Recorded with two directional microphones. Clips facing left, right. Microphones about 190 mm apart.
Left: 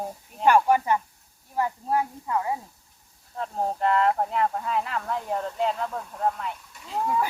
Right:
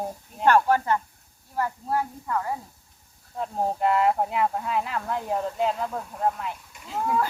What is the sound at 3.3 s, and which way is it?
Speech, 5° right (ahead or behind).